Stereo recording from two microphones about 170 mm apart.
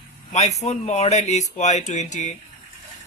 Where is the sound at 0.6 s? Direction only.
40° left (ahead or behind).